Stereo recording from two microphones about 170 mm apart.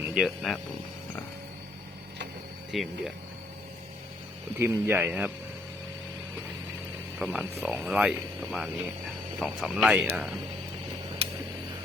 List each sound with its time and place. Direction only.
0.0 s speech: 5° right (ahead or behind)
2.7 s speech: centre (ahead or behind)
4.6 s speech: 15° right (ahead or behind)
7.2 s speech: centre (ahead or behind)